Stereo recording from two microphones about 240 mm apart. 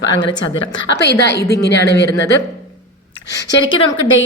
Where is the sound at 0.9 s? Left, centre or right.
Left.